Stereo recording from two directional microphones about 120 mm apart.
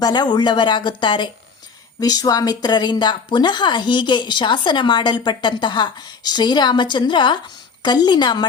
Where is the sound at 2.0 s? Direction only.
30° left (ahead or behind).